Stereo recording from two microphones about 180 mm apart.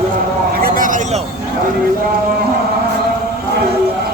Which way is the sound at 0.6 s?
50° right (ahead or behind).